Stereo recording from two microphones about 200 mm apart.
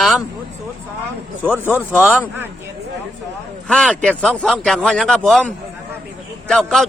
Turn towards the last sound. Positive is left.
turn(degrees=5)  # may be behind; listen again after turning